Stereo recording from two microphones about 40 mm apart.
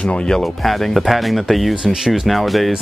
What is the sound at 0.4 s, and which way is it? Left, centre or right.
Speech, centre.